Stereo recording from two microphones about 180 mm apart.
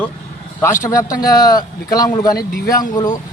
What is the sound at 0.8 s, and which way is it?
Speech, 20° left (ahead or behind).